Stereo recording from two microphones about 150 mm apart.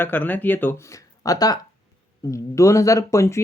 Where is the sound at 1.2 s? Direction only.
25° left (ahead or behind).